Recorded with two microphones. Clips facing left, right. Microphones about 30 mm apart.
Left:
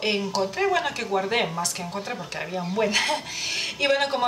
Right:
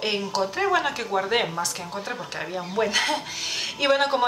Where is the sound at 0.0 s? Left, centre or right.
Centre.